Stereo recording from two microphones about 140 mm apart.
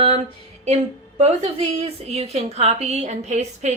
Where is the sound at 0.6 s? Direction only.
55° right (ahead or behind).